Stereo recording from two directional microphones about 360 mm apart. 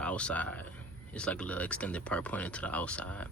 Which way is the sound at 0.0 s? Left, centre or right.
Centre.